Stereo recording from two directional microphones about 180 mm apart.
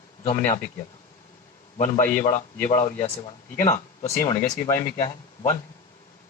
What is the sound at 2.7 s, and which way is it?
Speech, 40° left (ahead or behind).